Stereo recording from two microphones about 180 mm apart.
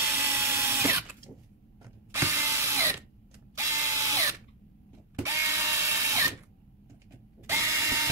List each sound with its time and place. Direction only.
0.2 s tools: 15° right (ahead or behind)
2.1 s ratchet: 15° right (ahead or behind)
3.5 s drill: 15° right (ahead or behind)
5.2 s ratchet: 15° right (ahead or behind)
7.4 s mechanisms: 15° right (ahead or behind)